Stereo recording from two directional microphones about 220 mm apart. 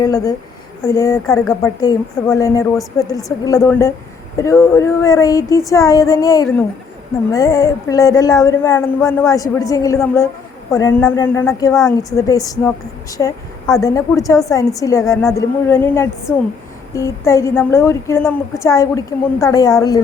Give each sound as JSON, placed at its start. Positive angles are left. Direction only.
{"t": 0.0, "sound": "a woman's voice", "side_deg": 15}